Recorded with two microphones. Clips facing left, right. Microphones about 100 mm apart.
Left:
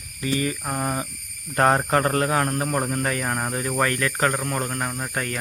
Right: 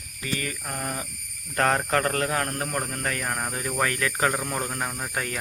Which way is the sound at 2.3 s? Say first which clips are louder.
Left 5 dB; 5° left (ahead or behind).